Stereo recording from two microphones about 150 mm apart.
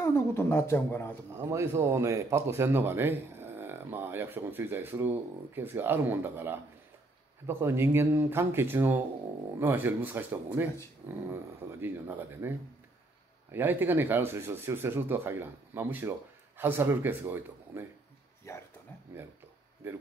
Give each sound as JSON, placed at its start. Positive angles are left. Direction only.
{"t": 0.0, "sound": "speech", "side_deg": 15}
{"t": 1.3, "sound": "speech", "side_deg": -20}
{"t": 11.8, "sound": "speech", "side_deg": -15}
{"t": 18.5, "sound": "speech", "side_deg": 20}
{"t": 19.8, "sound": "speech", "side_deg": -15}